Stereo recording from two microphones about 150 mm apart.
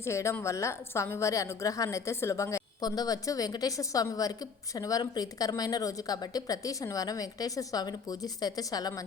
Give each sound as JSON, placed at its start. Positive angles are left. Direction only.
{"t": 0.0, "sound": "a woman's voice", "side_deg": 20}